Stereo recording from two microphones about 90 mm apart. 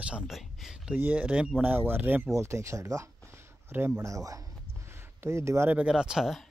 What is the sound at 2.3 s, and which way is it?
Speech, 35° right (ahead or behind).